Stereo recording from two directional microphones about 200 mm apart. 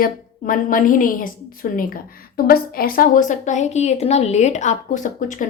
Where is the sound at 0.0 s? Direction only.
45° left (ahead or behind).